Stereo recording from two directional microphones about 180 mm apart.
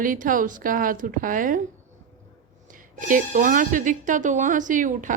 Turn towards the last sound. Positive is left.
turn(degrees=-45)  # may be behind; listen again after turning